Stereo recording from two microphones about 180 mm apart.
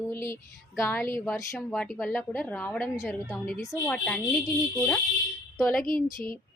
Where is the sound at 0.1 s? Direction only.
15° left (ahead or behind).